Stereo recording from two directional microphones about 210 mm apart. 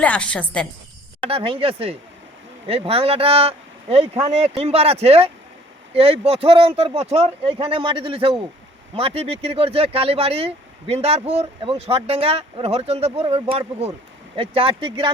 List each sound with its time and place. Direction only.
0.0 s a woman's voice: 5° left (ahead or behind)
1.3 s speech: 25° right (ahead or behind)